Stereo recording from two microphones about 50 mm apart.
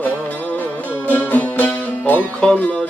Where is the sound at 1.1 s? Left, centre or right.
Left.